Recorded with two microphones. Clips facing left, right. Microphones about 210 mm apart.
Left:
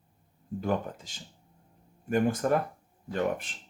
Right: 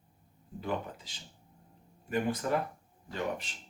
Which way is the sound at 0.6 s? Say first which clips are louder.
Left 5 dB; 45° left (ahead or behind).